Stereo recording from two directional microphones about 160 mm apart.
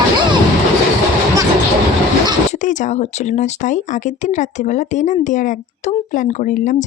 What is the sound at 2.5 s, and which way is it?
Speech, 50° left (ahead or behind).